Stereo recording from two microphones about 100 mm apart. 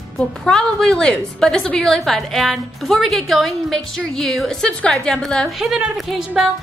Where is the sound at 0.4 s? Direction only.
5° left (ahead or behind).